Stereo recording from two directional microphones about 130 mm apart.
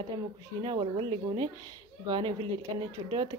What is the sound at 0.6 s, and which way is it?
Speech, 45° right (ahead or behind).